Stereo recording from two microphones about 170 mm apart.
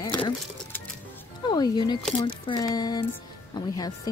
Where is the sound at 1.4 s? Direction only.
25° left (ahead or behind).